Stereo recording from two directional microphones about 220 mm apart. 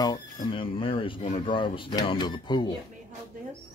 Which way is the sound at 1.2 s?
35° left (ahead or behind).